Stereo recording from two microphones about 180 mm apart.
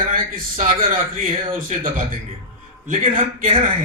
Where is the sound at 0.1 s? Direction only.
50° right (ahead or behind).